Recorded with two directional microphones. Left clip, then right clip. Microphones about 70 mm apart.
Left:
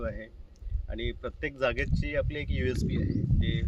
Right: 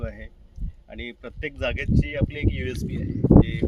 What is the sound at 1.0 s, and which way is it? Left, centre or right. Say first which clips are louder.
Speech: right 1 dB; centre.